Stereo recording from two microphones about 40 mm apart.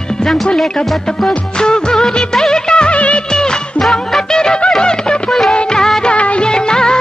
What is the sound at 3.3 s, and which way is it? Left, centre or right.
Music, centre.